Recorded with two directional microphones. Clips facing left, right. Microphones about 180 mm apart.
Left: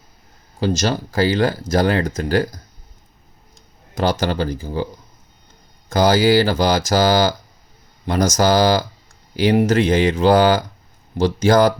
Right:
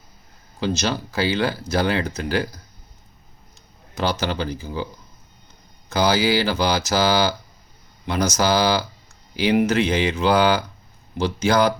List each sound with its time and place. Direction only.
0.6 s speech: 45° left (ahead or behind)
3.9 s speech: 45° left (ahead or behind)
5.9 s speech: 45° left (ahead or behind)